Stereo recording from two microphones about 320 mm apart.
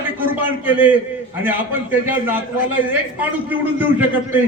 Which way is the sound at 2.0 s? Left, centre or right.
Centre.